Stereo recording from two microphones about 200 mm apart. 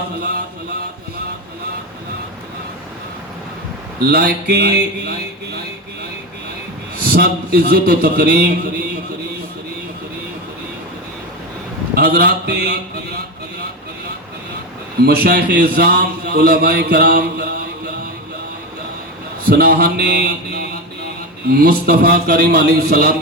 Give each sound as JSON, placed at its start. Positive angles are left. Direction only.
{"t": 4.0, "sound": "a man's voice", "side_deg": -50}
{"t": 7.1, "sound": "a man's voice", "side_deg": -50}
{"t": 11.9, "sound": "a man's voice", "side_deg": -50}
{"t": 15.0, "sound": "a man's voice", "side_deg": -50}
{"t": 19.5, "sound": "a man's voice", "side_deg": -50}